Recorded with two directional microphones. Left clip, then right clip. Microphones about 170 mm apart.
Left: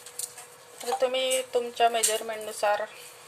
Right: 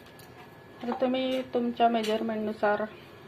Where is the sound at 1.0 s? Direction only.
10° left (ahead or behind).